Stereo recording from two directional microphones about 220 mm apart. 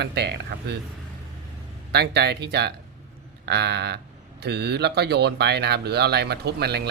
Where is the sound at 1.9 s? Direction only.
50° right (ahead or behind).